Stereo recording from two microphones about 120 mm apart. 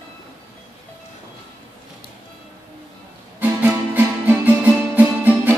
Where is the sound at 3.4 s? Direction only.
15° right (ahead or behind).